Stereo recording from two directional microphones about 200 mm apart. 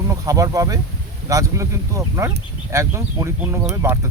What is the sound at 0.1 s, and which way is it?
Speech, 15° right (ahead or behind).